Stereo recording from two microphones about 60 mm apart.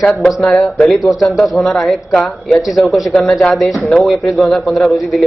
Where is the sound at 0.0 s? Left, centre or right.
Centre.